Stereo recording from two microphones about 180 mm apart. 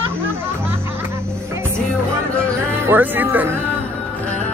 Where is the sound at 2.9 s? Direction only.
10° right (ahead or behind).